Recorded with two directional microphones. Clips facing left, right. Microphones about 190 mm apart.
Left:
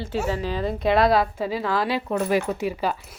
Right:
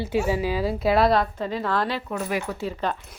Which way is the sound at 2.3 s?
20° left (ahead or behind).